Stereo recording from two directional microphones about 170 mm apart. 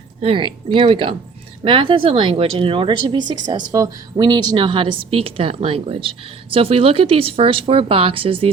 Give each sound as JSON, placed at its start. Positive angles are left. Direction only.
{"t": 0.2, "sound": "a woman's voice", "side_deg": -30}